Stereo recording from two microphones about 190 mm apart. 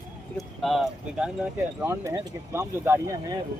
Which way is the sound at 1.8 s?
15° right (ahead or behind).